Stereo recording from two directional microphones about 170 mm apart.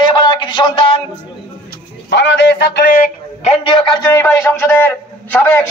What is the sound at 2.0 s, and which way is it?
Speech, 90° left.